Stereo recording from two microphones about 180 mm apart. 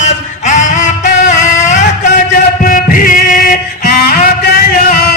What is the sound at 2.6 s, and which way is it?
Music, 50° left (ahead or behind).